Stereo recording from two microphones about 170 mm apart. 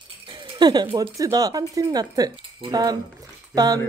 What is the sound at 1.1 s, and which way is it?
Speech, 20° right (ahead or behind).